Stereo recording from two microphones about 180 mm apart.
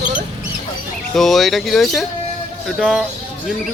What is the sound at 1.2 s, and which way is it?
Speech, centre (ahead or behind).